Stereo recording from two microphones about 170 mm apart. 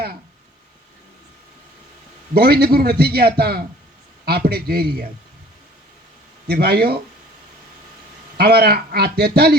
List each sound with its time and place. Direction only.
2.3 s a man's voice: 65° right (ahead or behind)
6.5 s a man's voice: 70° right (ahead or behind)
8.4 s a man's voice: 65° right (ahead or behind)